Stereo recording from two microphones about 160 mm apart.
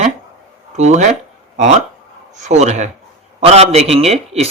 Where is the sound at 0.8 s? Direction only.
45° right (ahead or behind).